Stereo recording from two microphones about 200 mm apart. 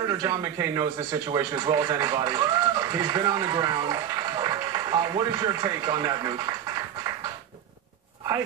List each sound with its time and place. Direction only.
0.2 s speech: 15° right (ahead or behind)